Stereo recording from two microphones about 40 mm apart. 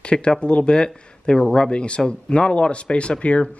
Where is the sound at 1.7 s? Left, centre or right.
Left.